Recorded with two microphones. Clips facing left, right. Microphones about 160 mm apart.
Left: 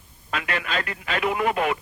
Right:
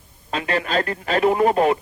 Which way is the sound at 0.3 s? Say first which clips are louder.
Right 5 dB; 30° right (ahead or behind).